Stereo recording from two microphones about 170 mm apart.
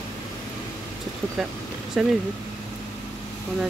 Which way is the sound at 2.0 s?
5° right (ahead or behind).